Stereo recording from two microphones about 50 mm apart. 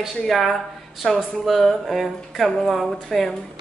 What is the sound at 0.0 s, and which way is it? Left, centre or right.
A woman's voice, centre.